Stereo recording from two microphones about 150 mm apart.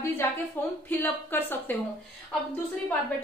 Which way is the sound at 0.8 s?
15° left (ahead or behind).